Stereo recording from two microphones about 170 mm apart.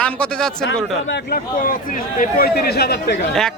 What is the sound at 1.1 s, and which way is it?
Speech, 80° left.